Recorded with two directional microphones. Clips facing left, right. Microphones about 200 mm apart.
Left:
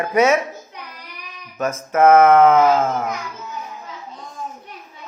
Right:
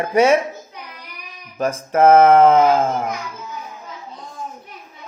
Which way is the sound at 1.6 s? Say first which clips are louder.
Right 1 dB; 30° right (ahead or behind).